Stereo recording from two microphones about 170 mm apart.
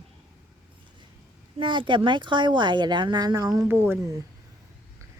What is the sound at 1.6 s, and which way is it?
Speech, 30° right (ahead or behind).